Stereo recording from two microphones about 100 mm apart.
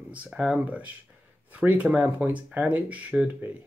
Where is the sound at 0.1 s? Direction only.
15° right (ahead or behind).